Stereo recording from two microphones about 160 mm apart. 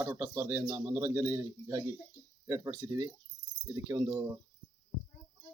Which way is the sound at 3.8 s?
25° right (ahead or behind).